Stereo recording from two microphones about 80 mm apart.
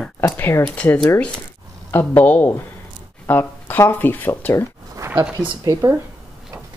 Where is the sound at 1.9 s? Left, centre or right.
Left.